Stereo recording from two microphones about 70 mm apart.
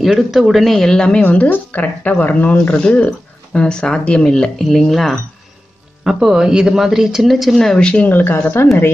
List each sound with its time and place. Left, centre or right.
0.0 s speech: centre
1.2 s a woman's voice: left; by 5.2 s centre
6.0 s speech: centre
8.1 s a woman's voice: left